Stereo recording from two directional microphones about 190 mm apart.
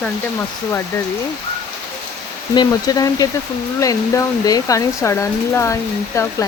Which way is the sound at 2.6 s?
20° left (ahead or behind).